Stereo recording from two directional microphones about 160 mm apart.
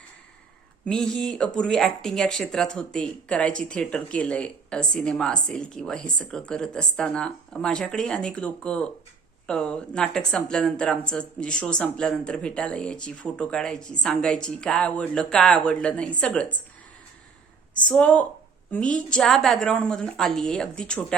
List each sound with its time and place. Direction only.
0.9 s speech: 5° left (ahead or behind)
17.7 s speech: 10° left (ahead or behind)